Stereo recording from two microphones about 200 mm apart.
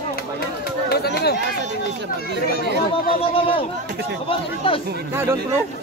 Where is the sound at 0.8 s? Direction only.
55° left (ahead or behind).